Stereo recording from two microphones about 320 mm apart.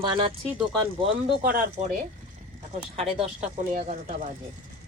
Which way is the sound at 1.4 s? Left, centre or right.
Right.